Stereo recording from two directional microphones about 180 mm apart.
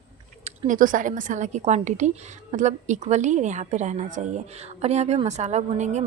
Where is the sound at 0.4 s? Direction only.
40° right (ahead or behind).